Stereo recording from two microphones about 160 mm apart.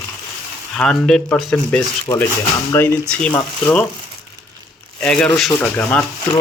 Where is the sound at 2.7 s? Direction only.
15° left (ahead or behind).